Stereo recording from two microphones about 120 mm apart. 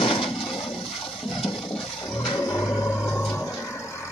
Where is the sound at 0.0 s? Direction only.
50° left (ahead or behind).